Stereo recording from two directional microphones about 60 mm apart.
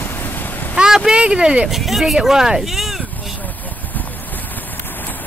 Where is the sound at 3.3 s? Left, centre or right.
Left.